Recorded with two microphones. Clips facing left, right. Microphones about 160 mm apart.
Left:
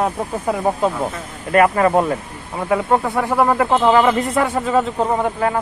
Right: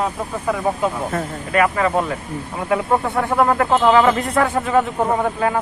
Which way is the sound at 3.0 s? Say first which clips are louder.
Even; 5° left (ahead or behind).